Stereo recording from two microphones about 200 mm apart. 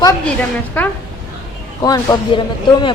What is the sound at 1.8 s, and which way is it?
Speech, 20° left (ahead or behind).